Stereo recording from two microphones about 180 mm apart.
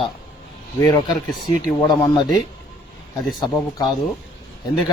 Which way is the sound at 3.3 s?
20° left (ahead or behind).